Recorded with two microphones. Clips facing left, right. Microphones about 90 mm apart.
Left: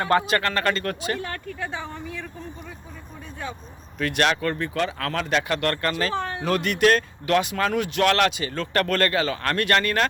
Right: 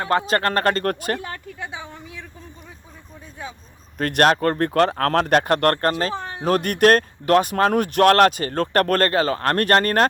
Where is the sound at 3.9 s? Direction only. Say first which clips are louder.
Right 5 dB; 50° right (ahead or behind).